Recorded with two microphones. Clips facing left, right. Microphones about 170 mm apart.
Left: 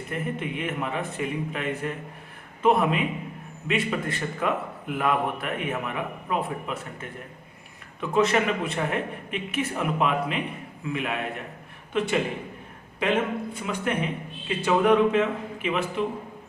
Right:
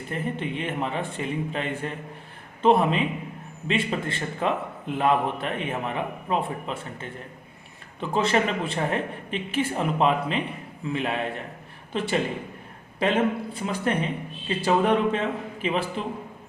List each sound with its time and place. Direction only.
0.1 s a man's voice: 30° right (ahead or behind)